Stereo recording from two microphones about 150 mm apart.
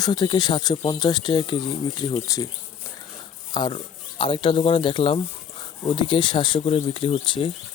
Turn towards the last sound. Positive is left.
turn(degrees=35)  # may be behind; listen again after turning